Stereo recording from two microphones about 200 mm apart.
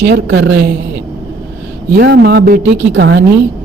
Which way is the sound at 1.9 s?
55° right (ahead or behind).